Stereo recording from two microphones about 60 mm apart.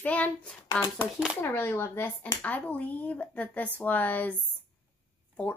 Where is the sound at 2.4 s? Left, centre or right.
Left.